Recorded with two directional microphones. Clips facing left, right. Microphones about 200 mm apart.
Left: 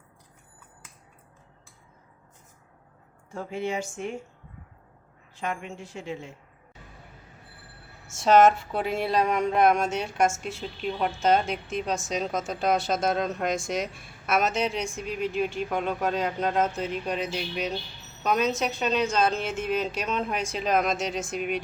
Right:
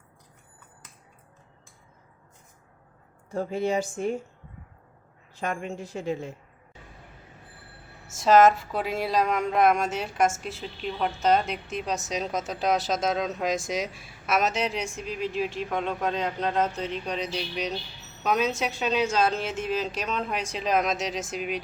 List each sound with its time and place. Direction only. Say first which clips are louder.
3.3 s a woman's voice: right 4 dB; 35° right (ahead or behind)
5.4 s a woman's voice: right 2 dB; 40° right (ahead or behind)
8.1 s a woman's voice: even; centre (ahead or behind)